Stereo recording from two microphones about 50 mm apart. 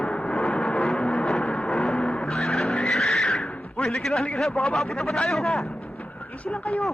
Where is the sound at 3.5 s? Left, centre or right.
Left.